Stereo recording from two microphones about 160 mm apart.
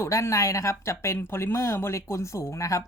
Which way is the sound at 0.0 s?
20° left (ahead or behind).